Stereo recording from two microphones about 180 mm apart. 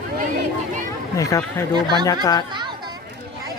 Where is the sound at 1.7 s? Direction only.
25° right (ahead or behind).